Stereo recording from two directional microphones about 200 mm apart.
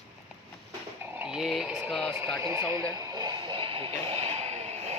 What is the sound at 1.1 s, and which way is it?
Speech, 5° right (ahead or behind).